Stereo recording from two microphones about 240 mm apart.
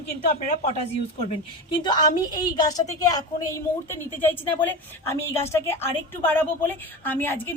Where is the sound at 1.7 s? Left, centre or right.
Centre.